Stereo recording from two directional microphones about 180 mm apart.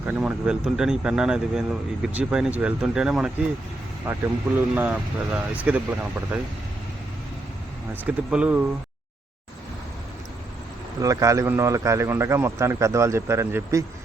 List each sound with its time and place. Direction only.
0.0 s speech: 5° right (ahead or behind)
8.0 s speech: 5° right (ahead or behind)
11.0 s speech: 20° right (ahead or behind)